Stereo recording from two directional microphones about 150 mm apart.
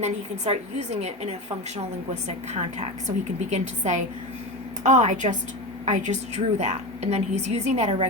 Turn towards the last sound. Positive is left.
turn(degrees=-50)  # may be behind; listen again after turning